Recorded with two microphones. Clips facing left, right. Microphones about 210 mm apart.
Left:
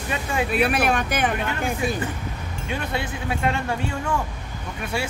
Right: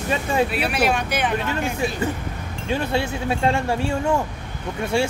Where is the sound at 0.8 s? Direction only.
50° left (ahead or behind).